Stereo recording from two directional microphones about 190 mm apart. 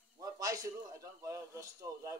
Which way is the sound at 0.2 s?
15° right (ahead or behind).